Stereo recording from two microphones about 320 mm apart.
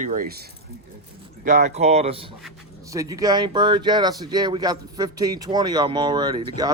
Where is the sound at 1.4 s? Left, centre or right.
Right.